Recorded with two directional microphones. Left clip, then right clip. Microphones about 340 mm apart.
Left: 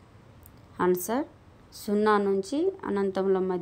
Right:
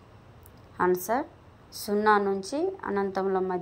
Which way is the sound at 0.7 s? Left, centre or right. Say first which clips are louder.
Right 1 dB; centre.